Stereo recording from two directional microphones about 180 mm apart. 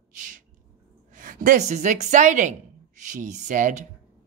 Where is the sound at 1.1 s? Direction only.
45° right (ahead or behind).